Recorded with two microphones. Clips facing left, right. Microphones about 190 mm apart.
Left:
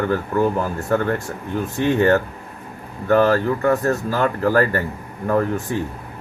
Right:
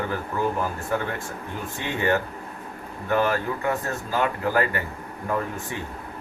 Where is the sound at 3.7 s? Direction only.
70° left (ahead or behind).